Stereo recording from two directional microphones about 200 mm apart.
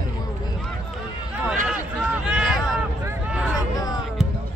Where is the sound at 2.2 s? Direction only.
5° right (ahead or behind).